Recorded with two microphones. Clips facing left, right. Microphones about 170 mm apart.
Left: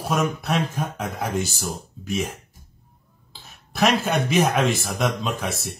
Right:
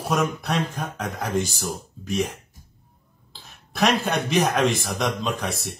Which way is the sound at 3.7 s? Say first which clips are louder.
Left 1 dB; centre (ahead or behind).